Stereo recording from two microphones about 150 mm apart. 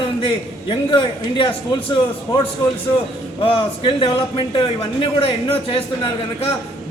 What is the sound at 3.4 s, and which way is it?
A man's voice, 35° left (ahead or behind).